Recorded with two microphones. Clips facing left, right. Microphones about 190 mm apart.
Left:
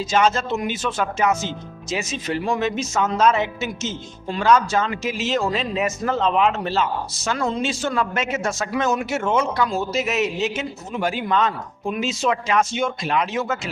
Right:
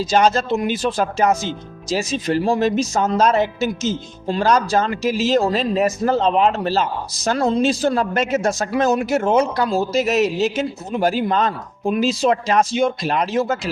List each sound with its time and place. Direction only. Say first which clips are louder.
0.0 s speech: right 3 dB; 35° right (ahead or behind)